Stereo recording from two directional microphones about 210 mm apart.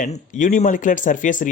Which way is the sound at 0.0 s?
35° left (ahead or behind).